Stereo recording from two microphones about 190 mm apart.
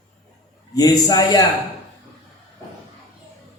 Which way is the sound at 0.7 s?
20° left (ahead or behind).